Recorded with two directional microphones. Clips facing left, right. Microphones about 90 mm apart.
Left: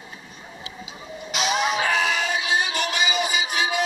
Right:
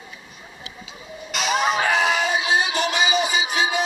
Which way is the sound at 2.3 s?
30° right (ahead or behind).